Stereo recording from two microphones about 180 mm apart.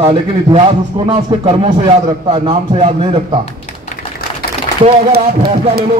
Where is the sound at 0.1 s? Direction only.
30° right (ahead or behind).